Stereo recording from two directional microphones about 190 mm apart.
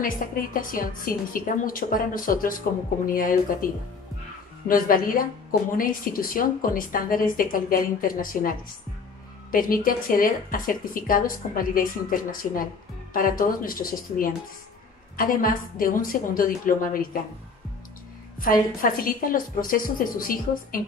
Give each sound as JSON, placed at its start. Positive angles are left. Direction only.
{"t": 0.0, "sound": "a woman's voice", "side_deg": 45}
{"t": 18.4, "sound": "a woman's voice", "side_deg": 50}